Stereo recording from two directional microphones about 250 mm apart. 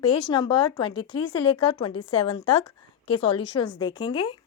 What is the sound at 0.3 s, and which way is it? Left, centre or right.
A woman's voice, centre.